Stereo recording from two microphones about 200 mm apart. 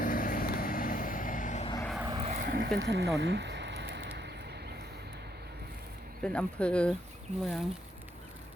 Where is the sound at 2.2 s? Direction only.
40° right (ahead or behind).